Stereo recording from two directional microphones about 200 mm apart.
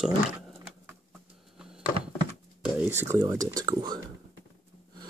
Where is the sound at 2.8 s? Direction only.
10° right (ahead or behind).